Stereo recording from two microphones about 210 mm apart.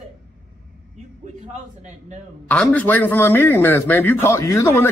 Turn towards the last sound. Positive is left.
turn(degrees=15)  # may be behind; listen again after turning